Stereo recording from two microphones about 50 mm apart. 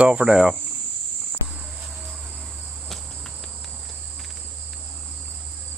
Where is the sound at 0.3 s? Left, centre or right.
Centre.